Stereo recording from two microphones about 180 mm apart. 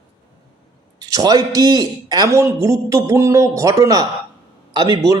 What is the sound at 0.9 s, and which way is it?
A man's voice, 20° right (ahead or behind).